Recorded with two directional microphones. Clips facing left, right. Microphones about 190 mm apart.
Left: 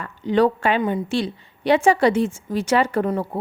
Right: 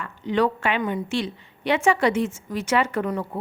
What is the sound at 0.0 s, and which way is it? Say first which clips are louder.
A woman's voice: left 4 dB; 35° left (ahead or behind).